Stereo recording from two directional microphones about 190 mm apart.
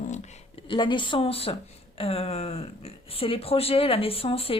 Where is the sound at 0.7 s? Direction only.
25° left (ahead or behind).